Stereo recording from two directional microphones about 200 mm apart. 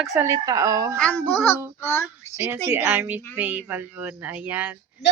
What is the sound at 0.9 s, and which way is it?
Speech, 5° left (ahead or behind).